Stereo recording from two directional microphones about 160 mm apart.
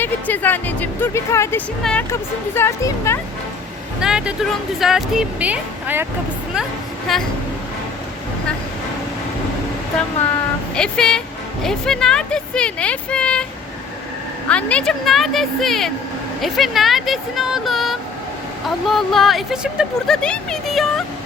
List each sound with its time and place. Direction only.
0.0 s speech: 10° left (ahead or behind)
2.6 s speech: 15° left (ahead or behind)
4.0 s speech: 5° right (ahead or behind)
7.1 s speech: centre (ahead or behind)
10.8 s speech: 5° left (ahead or behind)
14.5 s speech: 5° left (ahead or behind)